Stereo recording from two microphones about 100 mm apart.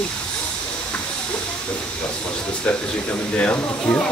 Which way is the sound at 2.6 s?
15° left (ahead or behind).